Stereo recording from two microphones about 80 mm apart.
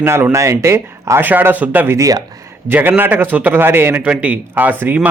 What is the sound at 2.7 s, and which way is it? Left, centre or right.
Speech, right.